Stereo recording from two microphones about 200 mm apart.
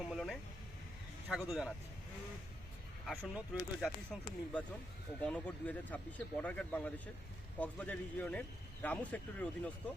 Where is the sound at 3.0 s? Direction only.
5° right (ahead or behind).